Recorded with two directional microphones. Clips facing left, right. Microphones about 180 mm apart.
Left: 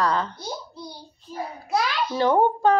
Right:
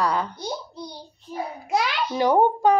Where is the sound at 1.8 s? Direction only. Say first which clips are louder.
Left 1 dB; 15° right (ahead or behind).